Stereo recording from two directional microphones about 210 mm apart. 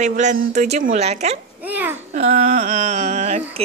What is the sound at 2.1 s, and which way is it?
A woman's voice, 35° right (ahead or behind).